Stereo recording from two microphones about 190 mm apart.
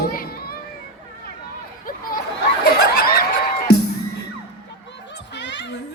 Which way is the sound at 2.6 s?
60° left (ahead or behind).